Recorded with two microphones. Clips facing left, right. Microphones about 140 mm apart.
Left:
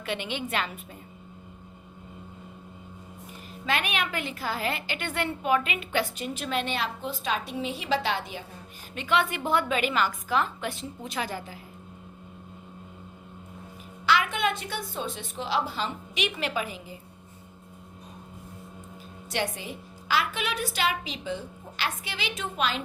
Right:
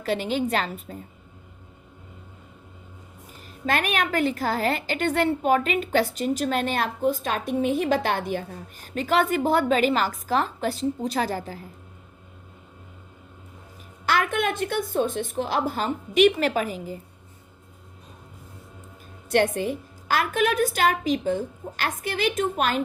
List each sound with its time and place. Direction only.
0.0 s a woman's voice: 40° right (ahead or behind)
3.7 s a woman's voice: 45° right (ahead or behind)
9.0 s a woman's voice: 40° right (ahead or behind)
14.1 s a woman's voice: 50° right (ahead or behind)
19.3 s a woman's voice: 55° right (ahead or behind)